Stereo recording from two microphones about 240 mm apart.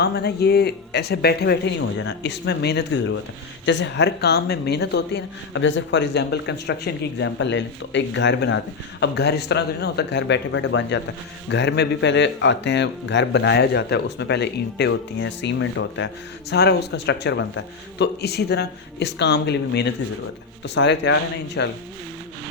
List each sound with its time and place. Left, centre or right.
0.0 s speech: left